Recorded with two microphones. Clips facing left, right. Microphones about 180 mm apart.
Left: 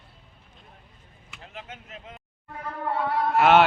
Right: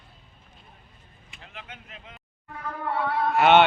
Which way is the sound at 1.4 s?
40° left (ahead or behind).